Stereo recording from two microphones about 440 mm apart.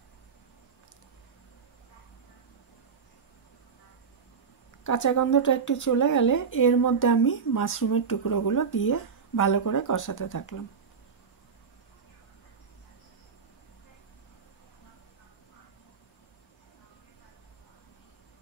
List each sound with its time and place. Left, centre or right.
4.8 s speech: left